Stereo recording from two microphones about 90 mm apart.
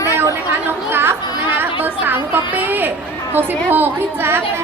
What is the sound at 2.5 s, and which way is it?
A woman's voice, 20° right (ahead or behind).